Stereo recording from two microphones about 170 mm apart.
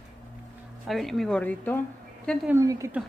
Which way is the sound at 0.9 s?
Centre (ahead or behind).